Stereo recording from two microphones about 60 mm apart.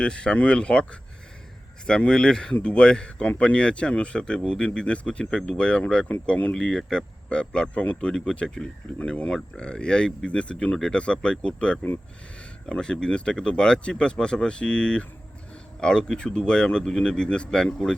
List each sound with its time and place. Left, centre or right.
0.0 s speech: centre